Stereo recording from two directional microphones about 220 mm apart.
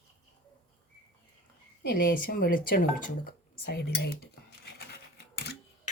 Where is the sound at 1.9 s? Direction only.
40° left (ahead or behind).